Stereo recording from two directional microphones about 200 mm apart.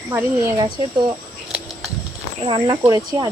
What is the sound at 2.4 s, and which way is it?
Speech, 25° right (ahead or behind).